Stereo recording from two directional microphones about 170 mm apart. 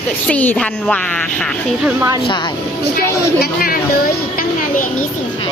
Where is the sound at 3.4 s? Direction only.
60° left (ahead or behind).